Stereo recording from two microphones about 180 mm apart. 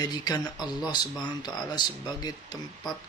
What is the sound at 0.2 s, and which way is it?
Speech, 25° left (ahead or behind).